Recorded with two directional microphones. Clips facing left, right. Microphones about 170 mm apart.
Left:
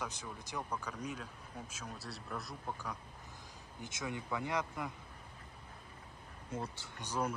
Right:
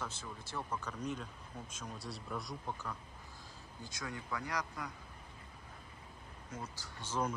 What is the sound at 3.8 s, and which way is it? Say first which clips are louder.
Speech: left 3 dB; 20° left (ahead or behind).